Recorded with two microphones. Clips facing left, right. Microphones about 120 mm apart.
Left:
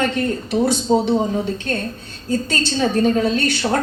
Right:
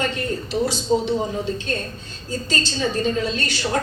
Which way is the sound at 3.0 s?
55° left (ahead or behind).